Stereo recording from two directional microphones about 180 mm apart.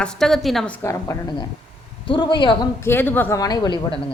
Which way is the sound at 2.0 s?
25° left (ahead or behind).